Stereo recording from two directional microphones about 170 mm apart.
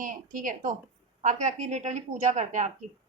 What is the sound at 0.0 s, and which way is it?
A woman's voice, 50° right (ahead or behind).